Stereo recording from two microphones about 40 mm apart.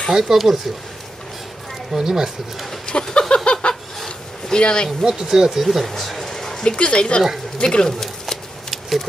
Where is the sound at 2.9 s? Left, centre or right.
Left.